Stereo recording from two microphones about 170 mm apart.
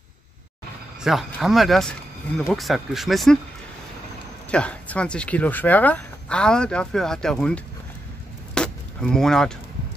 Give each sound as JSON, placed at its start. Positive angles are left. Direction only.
{"t": 1.0, "sound": "speech", "side_deg": 0}
{"t": 4.5, "sound": "speech", "side_deg": 5}
{"t": 8.5, "sound": "a sound", "side_deg": 5}